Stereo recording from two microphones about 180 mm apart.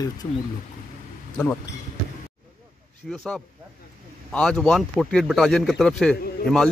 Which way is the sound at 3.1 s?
5° left (ahead or behind).